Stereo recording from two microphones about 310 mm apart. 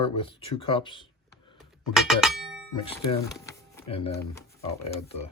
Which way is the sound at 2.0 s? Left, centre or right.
Centre.